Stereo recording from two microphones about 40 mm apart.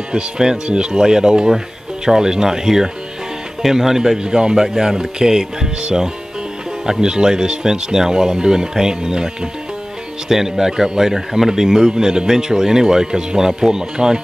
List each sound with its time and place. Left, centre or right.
0.1 s speech: centre